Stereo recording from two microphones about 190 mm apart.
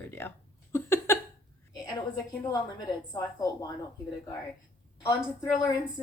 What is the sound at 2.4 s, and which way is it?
A woman's voice, 20° left (ahead or behind).